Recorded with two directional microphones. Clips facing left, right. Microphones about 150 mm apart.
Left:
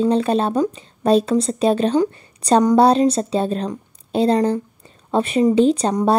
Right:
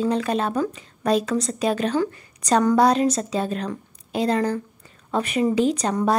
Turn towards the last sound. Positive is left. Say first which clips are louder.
# left 4 dB
turn(degrees=25)  # may be behind; listen again after turning